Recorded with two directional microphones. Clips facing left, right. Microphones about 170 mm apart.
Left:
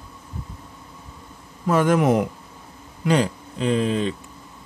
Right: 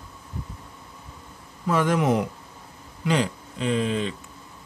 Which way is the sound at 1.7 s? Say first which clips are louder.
Left 4 dB; 45° left (ahead or behind).